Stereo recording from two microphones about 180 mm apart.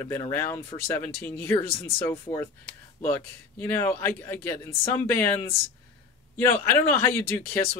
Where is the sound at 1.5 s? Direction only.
30° left (ahead or behind).